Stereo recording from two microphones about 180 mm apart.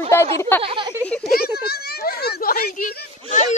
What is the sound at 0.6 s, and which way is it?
Speech, 25° right (ahead or behind).